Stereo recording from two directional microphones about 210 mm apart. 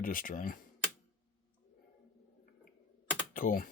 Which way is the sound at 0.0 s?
40° left (ahead or behind).